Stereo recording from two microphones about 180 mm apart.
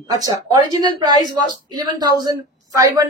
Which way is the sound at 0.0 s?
20° right (ahead or behind).